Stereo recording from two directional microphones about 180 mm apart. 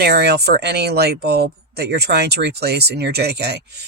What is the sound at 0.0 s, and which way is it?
Speech, 65° right (ahead or behind).